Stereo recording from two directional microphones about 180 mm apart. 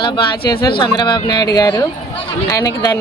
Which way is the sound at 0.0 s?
25° left (ahead or behind).